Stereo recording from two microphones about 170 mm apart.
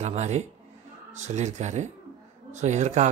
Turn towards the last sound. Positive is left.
turn(degrees=-45)  # may be behind; listen again after turning